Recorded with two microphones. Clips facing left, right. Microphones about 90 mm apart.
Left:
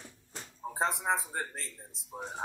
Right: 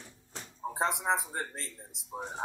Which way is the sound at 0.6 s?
20° right (ahead or behind).